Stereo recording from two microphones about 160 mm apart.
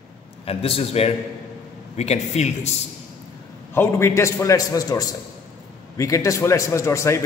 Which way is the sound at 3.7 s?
15° left (ahead or behind).